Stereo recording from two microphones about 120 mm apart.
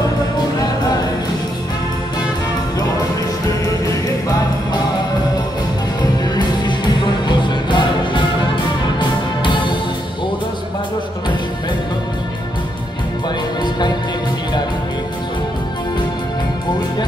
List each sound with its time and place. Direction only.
6.3 s music: 40° left (ahead or behind)
9.4 s music: 40° left (ahead or behind)
13.6 s music: 35° left (ahead or behind)